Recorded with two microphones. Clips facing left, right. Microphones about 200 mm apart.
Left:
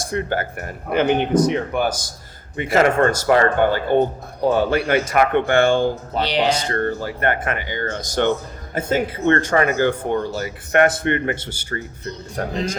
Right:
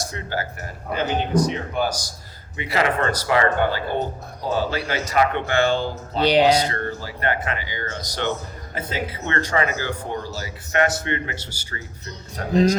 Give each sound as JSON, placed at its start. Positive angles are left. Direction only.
{"t": 0.1, "sound": "speech", "side_deg": 55}